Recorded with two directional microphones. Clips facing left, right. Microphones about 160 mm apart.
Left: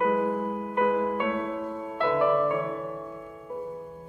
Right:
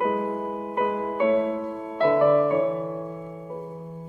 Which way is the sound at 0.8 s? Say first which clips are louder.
Right 1 dB; 20° right (ahead or behind).